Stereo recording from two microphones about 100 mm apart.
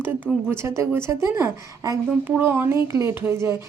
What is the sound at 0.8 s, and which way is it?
A woman's voice, 25° right (ahead or behind).